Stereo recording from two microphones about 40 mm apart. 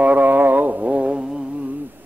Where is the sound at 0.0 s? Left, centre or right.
Right.